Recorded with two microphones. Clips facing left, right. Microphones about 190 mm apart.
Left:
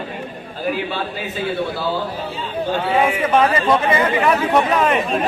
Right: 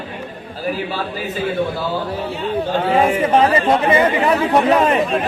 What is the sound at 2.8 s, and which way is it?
A man's voice, 40° right (ahead or behind).